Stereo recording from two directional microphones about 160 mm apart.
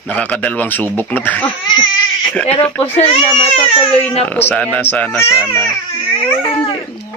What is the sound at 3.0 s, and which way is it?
Speech, 40° left (ahead or behind).